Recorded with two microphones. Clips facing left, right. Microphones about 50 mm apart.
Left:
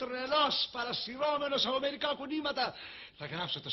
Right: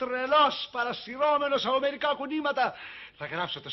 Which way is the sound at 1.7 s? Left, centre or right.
Right.